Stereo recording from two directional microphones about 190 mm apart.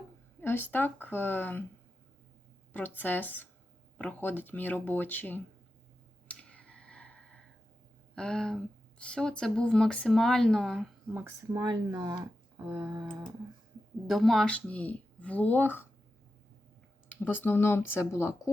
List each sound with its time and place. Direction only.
0.4 s speech: 10° left (ahead or behind)
2.7 s speech: 10° left (ahead or behind)
6.2 s clicking: 5° left (ahead or behind)
8.1 s speech: 5° left (ahead or behind)
11.1 s speech: 10° right (ahead or behind)
12.7 s a sound: 20° right (ahead or behind)
14.1 s speech: centre (ahead or behind)
17.2 s speech: 10° left (ahead or behind)